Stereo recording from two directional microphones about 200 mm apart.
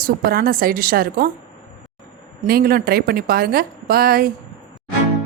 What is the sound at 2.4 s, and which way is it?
Speech, 50° right (ahead or behind).